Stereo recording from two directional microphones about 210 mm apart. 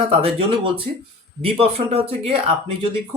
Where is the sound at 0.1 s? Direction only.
25° right (ahead or behind).